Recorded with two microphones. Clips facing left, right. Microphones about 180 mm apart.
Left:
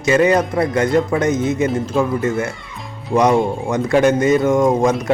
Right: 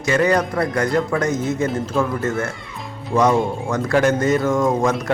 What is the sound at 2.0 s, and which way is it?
Speech, 15° left (ahead or behind).